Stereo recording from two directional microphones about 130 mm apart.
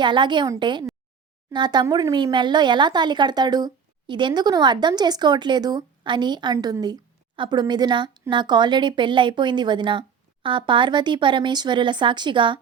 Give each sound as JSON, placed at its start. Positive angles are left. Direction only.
{"t": 0.0, "sound": "speech", "side_deg": -35}